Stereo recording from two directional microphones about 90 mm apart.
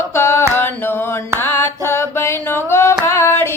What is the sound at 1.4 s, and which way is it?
Music, 25° left (ahead or behind).